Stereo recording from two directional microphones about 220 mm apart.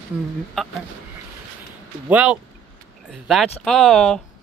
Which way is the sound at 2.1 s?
5° right (ahead or behind).